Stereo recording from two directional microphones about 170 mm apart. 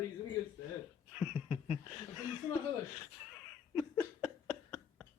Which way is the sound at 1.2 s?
5° right (ahead or behind).